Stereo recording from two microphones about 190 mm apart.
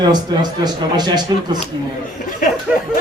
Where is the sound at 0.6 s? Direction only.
20° right (ahead or behind).